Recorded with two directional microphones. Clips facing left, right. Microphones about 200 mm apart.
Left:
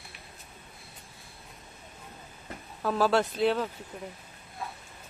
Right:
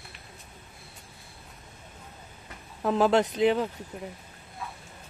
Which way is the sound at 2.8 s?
20° right (ahead or behind).